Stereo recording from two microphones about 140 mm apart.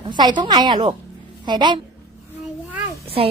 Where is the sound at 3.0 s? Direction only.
40° right (ahead or behind).